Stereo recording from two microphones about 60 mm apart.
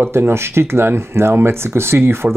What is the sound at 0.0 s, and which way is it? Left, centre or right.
Speech, right.